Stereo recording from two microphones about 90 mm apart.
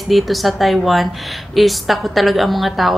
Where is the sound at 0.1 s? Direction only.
Centre (ahead or behind).